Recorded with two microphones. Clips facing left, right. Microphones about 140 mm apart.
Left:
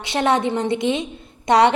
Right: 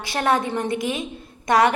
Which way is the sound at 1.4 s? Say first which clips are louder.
Left 3 dB; 25° left (ahead or behind).